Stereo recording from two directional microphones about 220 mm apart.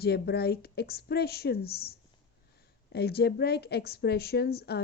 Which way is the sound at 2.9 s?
45° left (ahead or behind).